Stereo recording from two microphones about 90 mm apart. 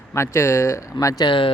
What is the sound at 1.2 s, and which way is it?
Speech, 65° left (ahead or behind).